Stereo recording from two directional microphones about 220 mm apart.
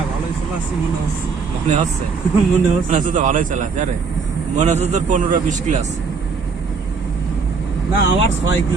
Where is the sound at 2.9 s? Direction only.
35° right (ahead or behind).